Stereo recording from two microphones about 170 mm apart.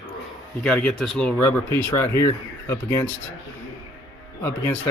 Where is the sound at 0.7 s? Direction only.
5° left (ahead or behind).